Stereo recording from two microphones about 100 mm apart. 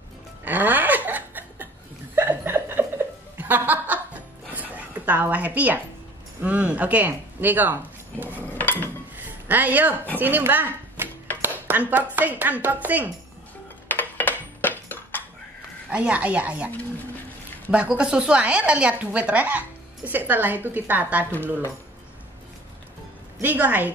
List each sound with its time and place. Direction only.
0.5 s laughter: 15° right (ahead or behind)
2.1 s chuckle: 20° right (ahead or behind)
3.3 s music: 20° right (ahead or behind)
6.4 s speech: 15° right (ahead or behind)
8.5 s dishes: 20° left (ahead or behind)
9.1 s music: 15° right (ahead or behind)
10.1 s speech: 20° right (ahead or behind)
11.4 s dishes: 20° right (ahead or behind)
12.2 s a woman's voice: 15° right (ahead or behind)
13.8 s dishes: 20° left (ahead or behind)
15.9 s a woman's voice: 15° right (ahead or behind)
23.4 s a woman's voice: 15° right (ahead or behind)